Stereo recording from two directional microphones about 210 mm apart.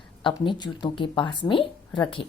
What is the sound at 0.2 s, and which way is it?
A woman's voice, 25° left (ahead or behind).